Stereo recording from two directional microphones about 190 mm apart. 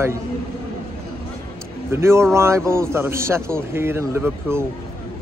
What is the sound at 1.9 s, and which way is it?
A man's voice, 15° right (ahead or behind).